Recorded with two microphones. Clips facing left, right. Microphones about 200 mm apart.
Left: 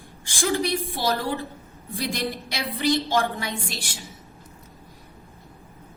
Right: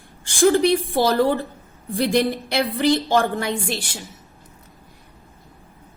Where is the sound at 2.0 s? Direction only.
55° right (ahead or behind).